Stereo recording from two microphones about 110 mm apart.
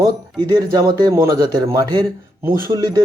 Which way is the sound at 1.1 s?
25° right (ahead or behind).